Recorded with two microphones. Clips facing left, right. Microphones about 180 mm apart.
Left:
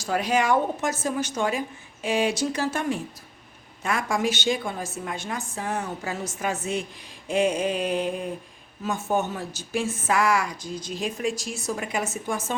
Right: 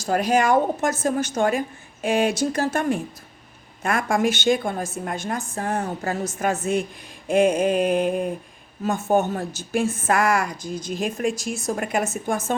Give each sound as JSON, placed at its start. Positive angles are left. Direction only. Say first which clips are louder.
{"t": 0.0, "sound": "a woman's voice", "louder": "right 4 dB", "side_deg": -45}